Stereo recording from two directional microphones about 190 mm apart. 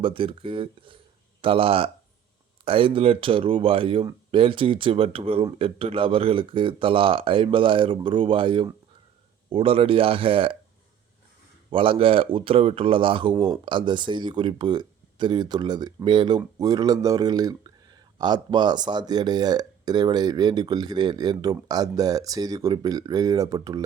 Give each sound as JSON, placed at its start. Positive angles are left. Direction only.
{"t": 0.0, "sound": "speech", "side_deg": -25}
{"t": 11.7, "sound": "speech", "side_deg": -30}